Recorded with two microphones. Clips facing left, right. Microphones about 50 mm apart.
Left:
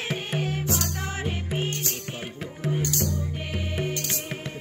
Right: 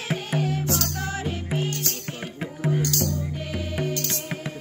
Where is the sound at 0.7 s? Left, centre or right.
Centre.